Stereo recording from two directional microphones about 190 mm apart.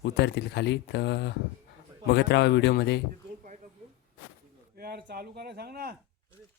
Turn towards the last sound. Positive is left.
turn(degrees=-55)  # may be behind; listen again after turning